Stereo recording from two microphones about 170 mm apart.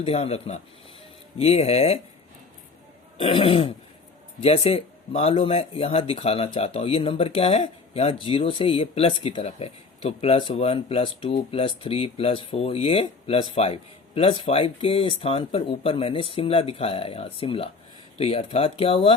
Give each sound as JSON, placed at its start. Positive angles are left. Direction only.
{"t": 0.0, "sound": "speech", "side_deg": 35}
{"t": 3.2, "sound": "speech", "side_deg": 30}